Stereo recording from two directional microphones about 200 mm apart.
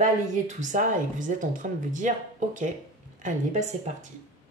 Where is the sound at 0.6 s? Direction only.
40° right (ahead or behind).